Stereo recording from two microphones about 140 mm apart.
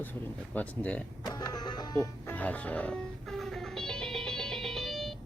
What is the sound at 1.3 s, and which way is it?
Music, 30° left (ahead or behind).